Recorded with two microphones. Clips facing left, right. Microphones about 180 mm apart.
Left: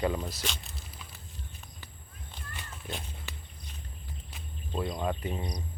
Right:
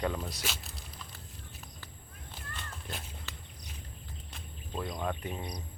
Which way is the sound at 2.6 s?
Centre (ahead or behind).